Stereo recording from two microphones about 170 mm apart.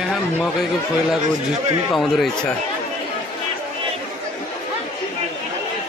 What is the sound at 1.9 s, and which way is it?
Speech, centre (ahead or behind).